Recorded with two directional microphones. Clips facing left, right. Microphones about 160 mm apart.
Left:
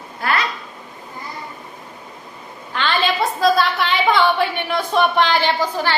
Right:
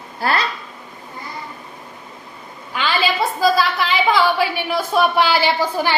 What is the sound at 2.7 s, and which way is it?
A woman's voice, 5° right (ahead or behind).